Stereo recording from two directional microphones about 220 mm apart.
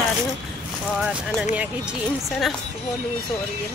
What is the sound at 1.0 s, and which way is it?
Speech, 5° right (ahead or behind).